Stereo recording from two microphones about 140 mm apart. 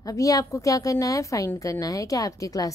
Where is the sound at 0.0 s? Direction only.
25° left (ahead or behind).